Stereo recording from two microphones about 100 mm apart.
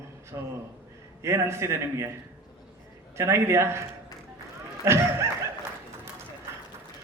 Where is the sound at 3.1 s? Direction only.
25° right (ahead or behind).